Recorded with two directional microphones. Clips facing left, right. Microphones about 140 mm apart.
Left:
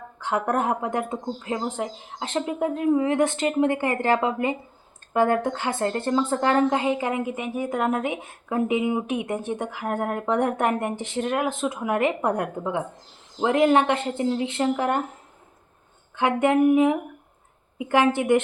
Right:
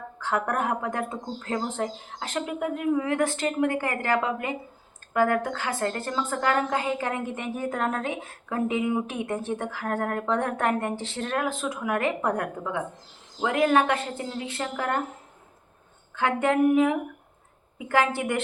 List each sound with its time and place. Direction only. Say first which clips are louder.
0.2 s speech: left 3 dB; 20° left (ahead or behind)
2.2 s a woman's voice: left 4 dB; 25° left (ahead or behind)
16.1 s a woman's voice: left 3 dB; 15° left (ahead or behind)